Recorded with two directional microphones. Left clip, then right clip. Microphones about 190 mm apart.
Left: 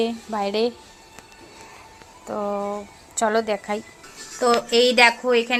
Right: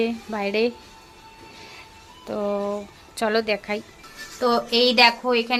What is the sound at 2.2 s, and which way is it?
Speech, 20° right (ahead or behind).